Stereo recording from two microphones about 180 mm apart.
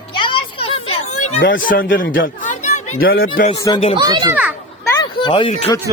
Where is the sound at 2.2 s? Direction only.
45° left (ahead or behind).